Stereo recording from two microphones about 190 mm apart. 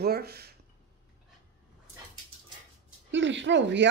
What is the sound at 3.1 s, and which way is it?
Speech, 75° right (ahead or behind).